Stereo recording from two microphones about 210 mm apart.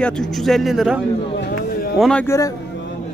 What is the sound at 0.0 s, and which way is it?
Speech, centre (ahead or behind).